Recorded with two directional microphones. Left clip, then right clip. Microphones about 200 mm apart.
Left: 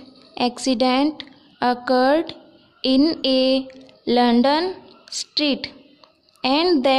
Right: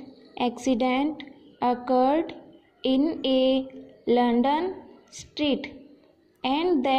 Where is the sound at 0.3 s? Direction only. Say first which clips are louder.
Left 4 dB; 15° left (ahead or behind).